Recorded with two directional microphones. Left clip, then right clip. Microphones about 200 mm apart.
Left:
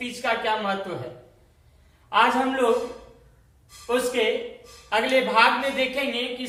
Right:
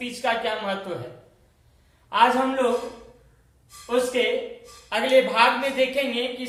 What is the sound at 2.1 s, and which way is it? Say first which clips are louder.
Speech: right 1 dB; 20° right (ahead or behind).